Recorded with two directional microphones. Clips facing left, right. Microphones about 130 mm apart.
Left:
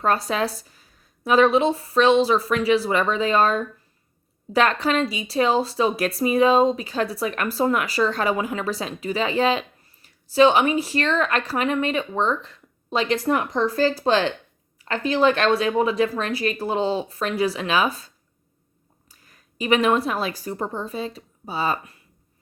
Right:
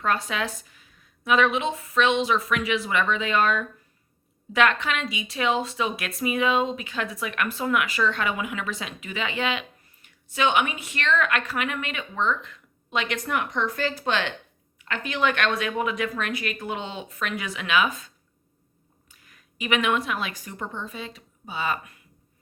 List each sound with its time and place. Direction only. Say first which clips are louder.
0.0 s a woman's voice: left 4 dB; 35° left (ahead or behind)